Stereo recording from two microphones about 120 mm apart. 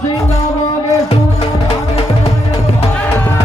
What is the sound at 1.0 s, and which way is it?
Music, 55° left (ahead or behind).